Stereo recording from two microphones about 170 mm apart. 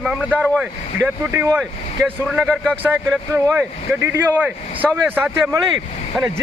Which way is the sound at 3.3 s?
15° right (ahead or behind).